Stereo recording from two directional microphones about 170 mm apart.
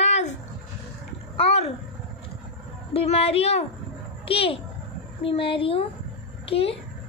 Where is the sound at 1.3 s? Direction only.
35° left (ahead or behind).